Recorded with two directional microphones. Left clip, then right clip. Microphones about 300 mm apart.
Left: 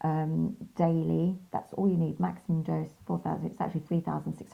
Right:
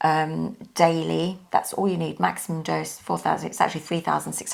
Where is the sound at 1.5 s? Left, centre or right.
Centre.